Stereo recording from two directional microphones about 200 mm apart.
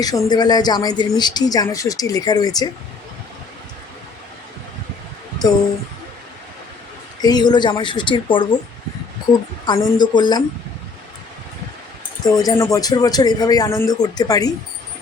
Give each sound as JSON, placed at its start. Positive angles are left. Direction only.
{"t": 0.0, "sound": "speech", "side_deg": 20}
{"t": 7.2, "sound": "speech", "side_deg": 20}
{"t": 9.6, "sound": "speech", "side_deg": 20}
{"t": 12.2, "sound": "speech", "side_deg": 20}